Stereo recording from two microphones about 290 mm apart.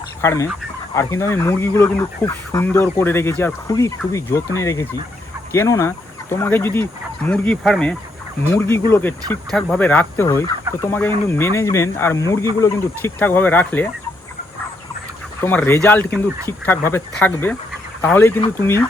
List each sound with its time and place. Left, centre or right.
0.2 s speech: centre
15.4 s speech: centre